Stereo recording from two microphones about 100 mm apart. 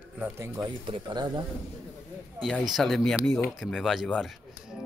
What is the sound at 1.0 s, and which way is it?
Speech, 45° right (ahead or behind).